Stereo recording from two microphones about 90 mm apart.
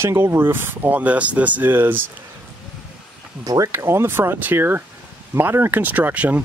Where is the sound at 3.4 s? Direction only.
40° right (ahead or behind).